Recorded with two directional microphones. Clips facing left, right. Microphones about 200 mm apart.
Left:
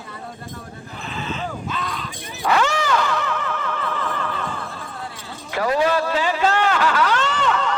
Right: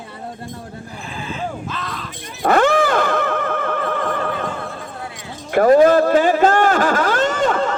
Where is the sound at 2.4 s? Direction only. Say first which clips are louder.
Right 6 dB; 50° right (ahead or behind).